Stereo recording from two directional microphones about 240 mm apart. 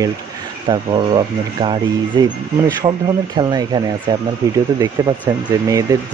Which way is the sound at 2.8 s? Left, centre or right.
Centre.